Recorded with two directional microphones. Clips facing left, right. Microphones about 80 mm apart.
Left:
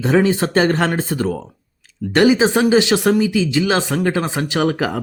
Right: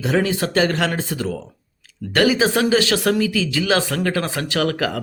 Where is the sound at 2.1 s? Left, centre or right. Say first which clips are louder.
Left 3 dB; left.